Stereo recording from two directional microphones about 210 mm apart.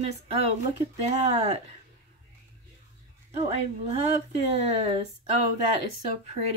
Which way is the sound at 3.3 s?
30° right (ahead or behind).